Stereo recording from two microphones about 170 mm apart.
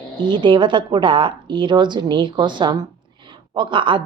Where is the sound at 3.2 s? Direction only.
30° right (ahead or behind).